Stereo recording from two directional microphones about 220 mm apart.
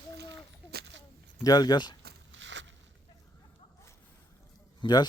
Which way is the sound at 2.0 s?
55° right (ahead or behind).